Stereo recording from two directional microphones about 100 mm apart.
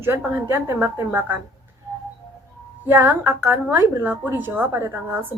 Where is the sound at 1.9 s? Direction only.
20° right (ahead or behind).